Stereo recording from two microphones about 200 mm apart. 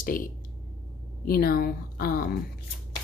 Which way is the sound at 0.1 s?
45° left (ahead or behind).